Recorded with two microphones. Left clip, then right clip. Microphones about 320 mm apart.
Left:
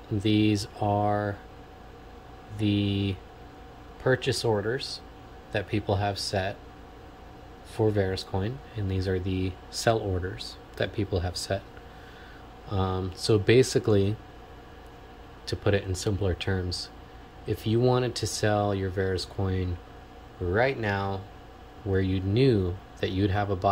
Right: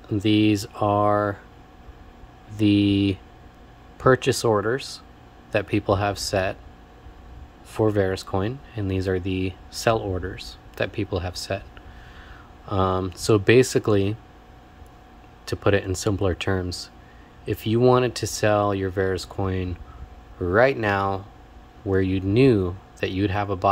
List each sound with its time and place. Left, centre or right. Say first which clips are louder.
0.2 s speech: right 5 dB; centre
2.5 s speech: right 9 dB; centre
7.7 s speech: right 5 dB; centre
12.6 s speech: right 8 dB; centre
15.4 s speech: right 5 dB; centre